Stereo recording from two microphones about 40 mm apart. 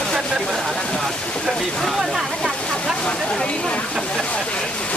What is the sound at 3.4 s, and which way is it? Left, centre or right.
Speech, left.